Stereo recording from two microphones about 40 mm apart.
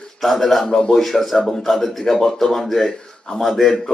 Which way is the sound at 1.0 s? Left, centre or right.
Centre.